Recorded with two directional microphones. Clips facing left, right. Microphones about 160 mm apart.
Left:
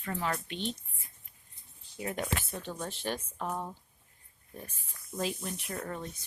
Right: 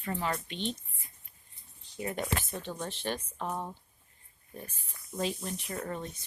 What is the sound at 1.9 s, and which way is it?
Speech, centre (ahead or behind).